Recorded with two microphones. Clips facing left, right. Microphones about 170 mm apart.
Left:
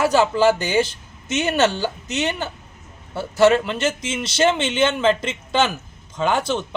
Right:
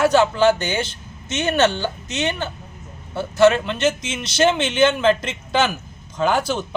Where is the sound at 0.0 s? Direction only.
5° left (ahead or behind).